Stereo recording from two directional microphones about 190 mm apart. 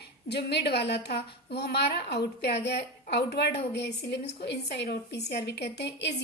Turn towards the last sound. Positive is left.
turn(degrees=60)  # may be behind; listen again after turning